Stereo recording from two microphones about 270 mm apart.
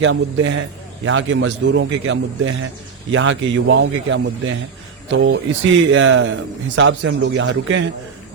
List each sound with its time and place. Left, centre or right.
0.0 s a man's voice: right